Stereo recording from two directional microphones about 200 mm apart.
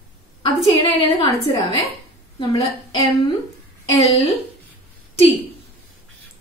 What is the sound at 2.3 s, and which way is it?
Speech, 20° left (ahead or behind).